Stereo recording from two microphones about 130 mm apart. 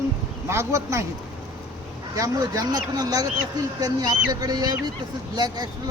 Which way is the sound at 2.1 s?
25° right (ahead or behind).